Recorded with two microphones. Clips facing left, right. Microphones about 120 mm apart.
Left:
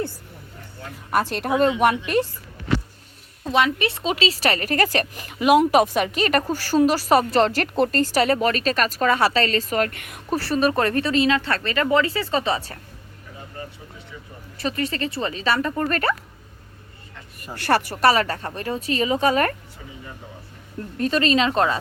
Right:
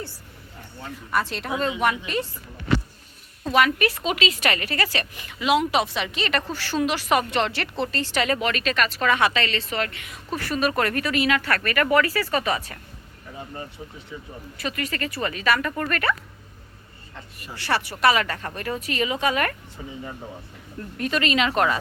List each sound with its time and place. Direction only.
1.1 s speech: 45° left (ahead or behind)
3.4 s speech: 25° left (ahead or behind); by 10.2 s 50° left (ahead or behind)
10.3 s speech: 30° left (ahead or behind)
14.6 s speech: 30° left (ahead or behind)
17.4 s speech: 50° left (ahead or behind)
21.0 s speech: 35° left (ahead or behind)